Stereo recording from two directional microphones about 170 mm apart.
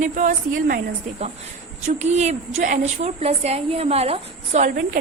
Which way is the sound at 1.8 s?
40° right (ahead or behind).